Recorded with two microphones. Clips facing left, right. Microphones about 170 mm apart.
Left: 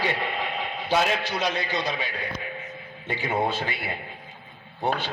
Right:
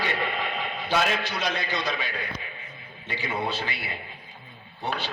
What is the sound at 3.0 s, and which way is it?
A man's voice, 50° left (ahead or behind).